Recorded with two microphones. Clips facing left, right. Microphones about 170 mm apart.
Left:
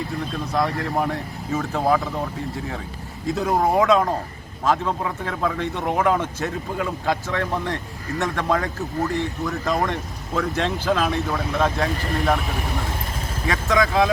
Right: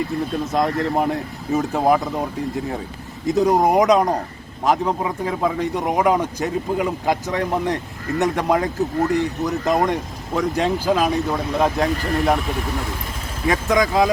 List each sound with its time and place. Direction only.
0.5 s speech: 20° right (ahead or behind)
3.2 s a man's voice: 15° right (ahead or behind)
13.5 s a man's voice: 15° right (ahead or behind)